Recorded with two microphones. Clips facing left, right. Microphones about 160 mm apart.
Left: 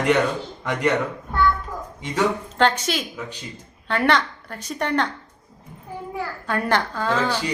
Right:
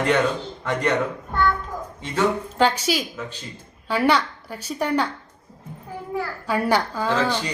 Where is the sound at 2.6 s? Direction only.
10° right (ahead or behind).